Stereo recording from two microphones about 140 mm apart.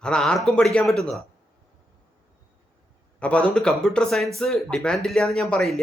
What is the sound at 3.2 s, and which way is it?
Speech, 10° left (ahead or behind).